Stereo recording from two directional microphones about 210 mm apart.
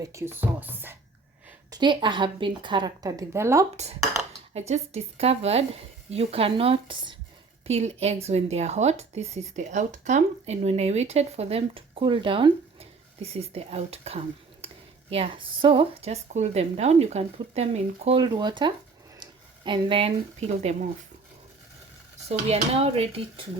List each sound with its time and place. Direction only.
0.0 s music: 15° right (ahead or behind)
1.5 s a woman's voice: 20° right (ahead or behind)
4.5 s a woman's voice: 30° right (ahead or behind)
19.2 s a sound: 20° right (ahead or behind)
22.3 s a woman's voice: 30° right (ahead or behind)